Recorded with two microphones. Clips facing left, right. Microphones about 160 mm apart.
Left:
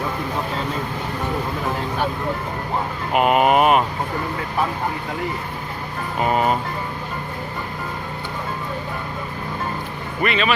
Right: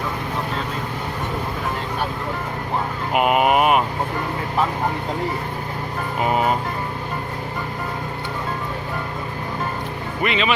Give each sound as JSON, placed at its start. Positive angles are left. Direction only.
{"t": 3.2, "sound": "speech", "side_deg": -10}
{"t": 10.2, "sound": "speech", "side_deg": -20}